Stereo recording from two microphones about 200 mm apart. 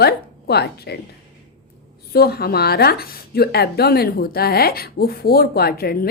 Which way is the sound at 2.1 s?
50° left (ahead or behind).